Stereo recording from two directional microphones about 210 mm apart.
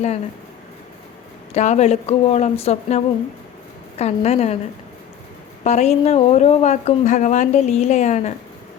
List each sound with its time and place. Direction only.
1.5 s speech: 35° left (ahead or behind)
5.6 s speech: 30° left (ahead or behind)